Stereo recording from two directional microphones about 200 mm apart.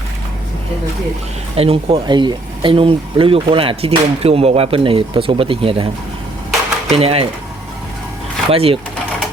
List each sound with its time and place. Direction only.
1.5 s speech: 30° right (ahead or behind)
6.9 s speech: 30° right (ahead or behind)
8.4 s speech: 30° right (ahead or behind)